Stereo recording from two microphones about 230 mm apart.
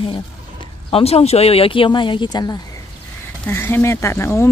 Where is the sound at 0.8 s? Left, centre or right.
Left.